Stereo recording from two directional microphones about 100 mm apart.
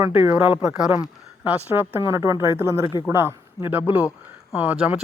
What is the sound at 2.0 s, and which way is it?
Speech, 30° right (ahead or behind).